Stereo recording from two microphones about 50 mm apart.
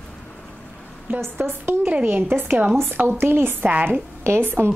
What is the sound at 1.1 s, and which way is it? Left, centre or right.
Speech, right.